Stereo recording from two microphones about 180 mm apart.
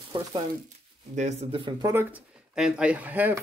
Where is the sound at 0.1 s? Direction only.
30° right (ahead or behind).